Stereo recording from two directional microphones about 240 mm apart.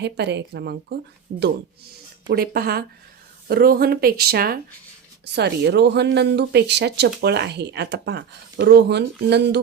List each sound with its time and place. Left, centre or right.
0.0 s speech: right
2.3 s speech: right